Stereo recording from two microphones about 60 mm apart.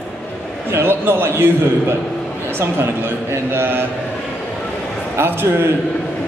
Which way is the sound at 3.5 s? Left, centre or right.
Right.